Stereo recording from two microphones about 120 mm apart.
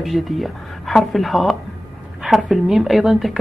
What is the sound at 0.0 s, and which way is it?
Speech, centre (ahead or behind).